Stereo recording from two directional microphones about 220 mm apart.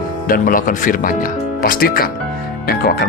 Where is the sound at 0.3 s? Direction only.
40° left (ahead or behind).